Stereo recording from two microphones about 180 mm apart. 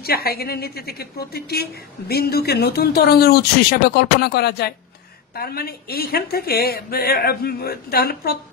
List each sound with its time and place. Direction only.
0.0 s a woman's voice: 60° left (ahead or behind)